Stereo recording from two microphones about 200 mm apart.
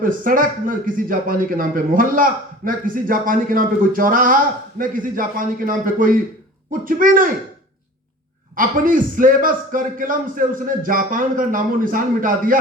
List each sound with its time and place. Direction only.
0.0 s a man's voice: 45° right (ahead or behind)
8.5 s a man's voice: 45° right (ahead or behind)